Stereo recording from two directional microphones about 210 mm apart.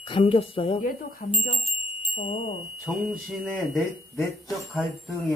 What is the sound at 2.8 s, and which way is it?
Speech, centre (ahead or behind).